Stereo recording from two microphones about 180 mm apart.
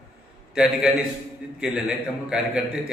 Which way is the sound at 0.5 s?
5° right (ahead or behind).